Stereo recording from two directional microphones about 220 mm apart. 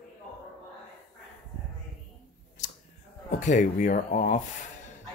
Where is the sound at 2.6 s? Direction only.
35° left (ahead or behind).